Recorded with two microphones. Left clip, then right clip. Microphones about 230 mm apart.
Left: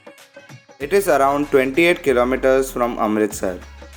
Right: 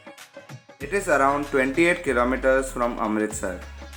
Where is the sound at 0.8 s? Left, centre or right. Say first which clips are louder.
Left 5 dB; left.